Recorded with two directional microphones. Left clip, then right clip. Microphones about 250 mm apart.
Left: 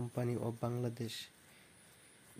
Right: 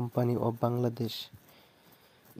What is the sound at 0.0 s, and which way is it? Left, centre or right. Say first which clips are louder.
Speech: right 9 dB; right.